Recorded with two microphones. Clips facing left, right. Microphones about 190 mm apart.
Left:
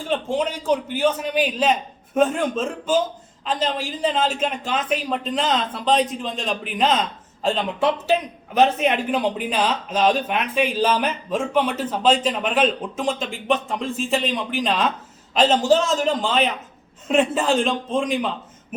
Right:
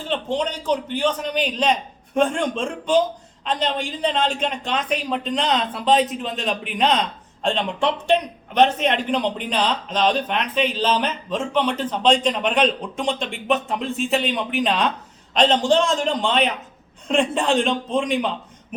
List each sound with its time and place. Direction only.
0.0 s speech: 10° left (ahead or behind)